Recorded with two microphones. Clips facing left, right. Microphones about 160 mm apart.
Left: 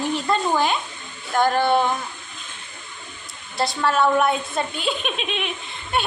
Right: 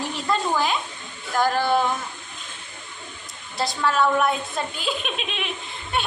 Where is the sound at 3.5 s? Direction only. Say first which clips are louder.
Left 2 dB; centre (ahead or behind).